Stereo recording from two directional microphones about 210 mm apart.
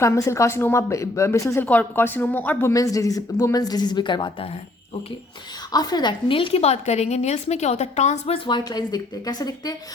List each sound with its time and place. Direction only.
0.0 s speech: 15° left (ahead or behind)
5.7 s a woman's voice: 20° left (ahead or behind)